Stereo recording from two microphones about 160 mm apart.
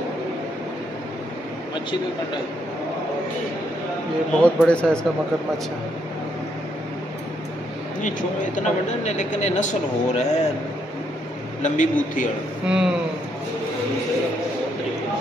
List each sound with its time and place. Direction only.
4.4 s speech: 5° left (ahead or behind)
8.0 s speech: 55° left (ahead or behind)
11.6 s speech: 50° left (ahead or behind)
12.6 s speech: 5° right (ahead or behind)